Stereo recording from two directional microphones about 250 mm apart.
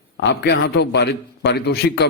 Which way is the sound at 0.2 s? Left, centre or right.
Left.